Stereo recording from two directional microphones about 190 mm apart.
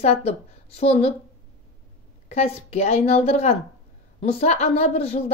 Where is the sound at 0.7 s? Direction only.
35° left (ahead or behind).